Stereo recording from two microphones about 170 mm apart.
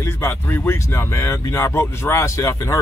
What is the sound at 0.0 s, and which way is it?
Speech, 15° left (ahead or behind).